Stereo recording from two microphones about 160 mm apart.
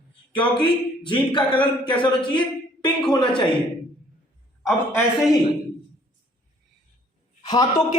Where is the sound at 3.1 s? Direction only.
25° left (ahead or behind).